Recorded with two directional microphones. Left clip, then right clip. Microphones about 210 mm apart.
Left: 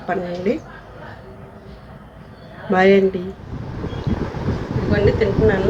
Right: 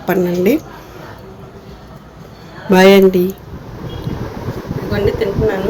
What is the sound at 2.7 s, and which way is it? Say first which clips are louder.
Speech: right 6 dB; 55° right (ahead or behind).